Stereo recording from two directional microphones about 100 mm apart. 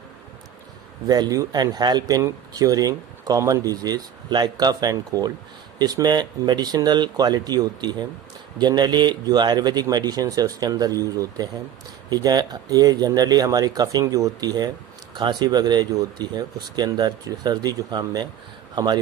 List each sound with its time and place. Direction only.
1.0 s speech: 40° right (ahead or behind)